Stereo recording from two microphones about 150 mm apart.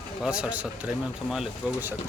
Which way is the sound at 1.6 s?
10° right (ahead or behind).